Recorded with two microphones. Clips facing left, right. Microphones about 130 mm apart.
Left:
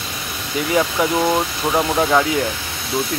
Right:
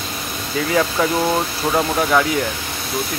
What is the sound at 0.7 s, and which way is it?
Speech, 20° left (ahead or behind).